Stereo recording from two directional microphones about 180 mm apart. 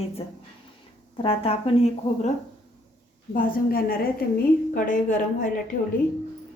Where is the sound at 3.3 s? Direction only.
55° left (ahead or behind).